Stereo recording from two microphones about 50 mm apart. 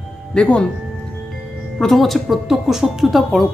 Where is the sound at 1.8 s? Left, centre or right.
Centre.